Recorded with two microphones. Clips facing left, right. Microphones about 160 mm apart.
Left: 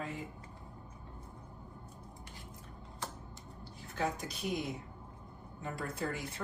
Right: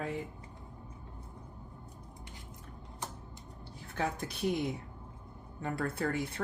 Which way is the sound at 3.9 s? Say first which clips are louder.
Right 1 dB; 60° right (ahead or behind).